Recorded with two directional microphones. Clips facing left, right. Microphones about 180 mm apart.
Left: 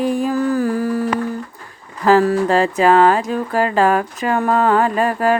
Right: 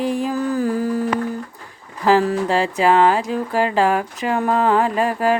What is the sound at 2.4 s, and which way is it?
Music, 50° left (ahead or behind).